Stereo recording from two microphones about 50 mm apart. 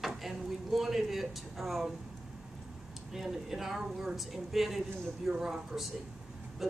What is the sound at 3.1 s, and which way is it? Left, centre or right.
Speech, centre.